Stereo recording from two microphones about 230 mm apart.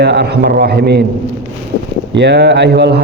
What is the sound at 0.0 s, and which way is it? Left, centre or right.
A man's voice, right.